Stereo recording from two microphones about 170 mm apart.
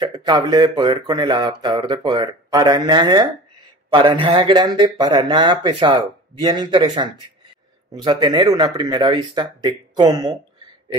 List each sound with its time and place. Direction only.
0.0 s speech: 25° right (ahead or behind)